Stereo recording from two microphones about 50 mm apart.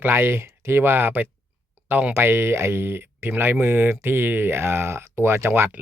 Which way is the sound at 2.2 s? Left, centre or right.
Right.